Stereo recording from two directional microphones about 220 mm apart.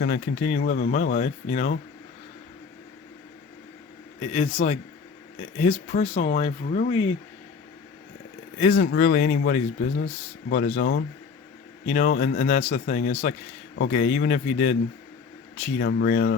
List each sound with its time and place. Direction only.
0.0 s speech: 40° left (ahead or behind)
4.2 s speech: 30° left (ahead or behind)
8.5 s speech: 35° left (ahead or behind)
11.9 s speech: 35° left (ahead or behind)